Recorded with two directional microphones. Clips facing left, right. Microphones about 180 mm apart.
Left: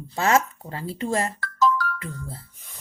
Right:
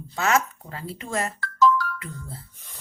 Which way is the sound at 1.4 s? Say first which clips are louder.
Right 2 dB; 45° left (ahead or behind).